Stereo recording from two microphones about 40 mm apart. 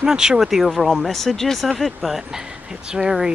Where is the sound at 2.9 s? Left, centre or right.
Centre.